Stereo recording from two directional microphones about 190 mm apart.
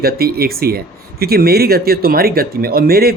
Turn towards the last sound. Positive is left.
turn(degrees=-55)  # may be behind; listen again after turning